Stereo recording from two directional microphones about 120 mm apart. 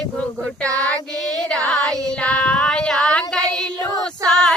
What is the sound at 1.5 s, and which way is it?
Music, 5° left (ahead or behind).